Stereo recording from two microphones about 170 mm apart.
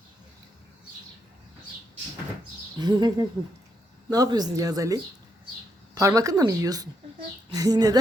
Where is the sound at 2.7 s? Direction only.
25° right (ahead or behind).